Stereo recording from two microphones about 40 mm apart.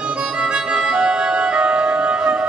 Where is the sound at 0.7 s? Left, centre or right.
Centre.